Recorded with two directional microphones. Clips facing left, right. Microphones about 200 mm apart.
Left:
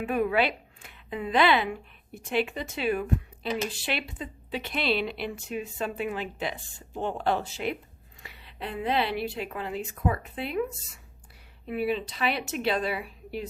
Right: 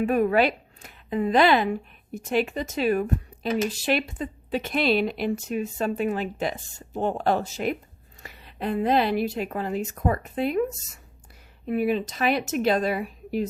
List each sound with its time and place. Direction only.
0.0 s speech: 45° right (ahead or behind)